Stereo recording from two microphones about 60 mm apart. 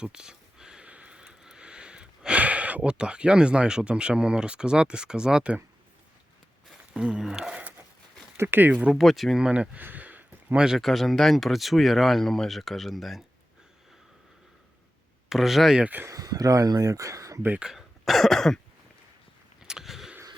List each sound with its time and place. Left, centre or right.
0.0 s a sound: centre
6.9 s speech: centre
8.4 s speech: right
8.9 s speech: centre
9.4 s speech: right
9.8 s a sound: right
10.8 s speech: centre
15.3 s speech: centre
16.0 s speech: right
17.6 s speech: centre
19.6 s a sound: centre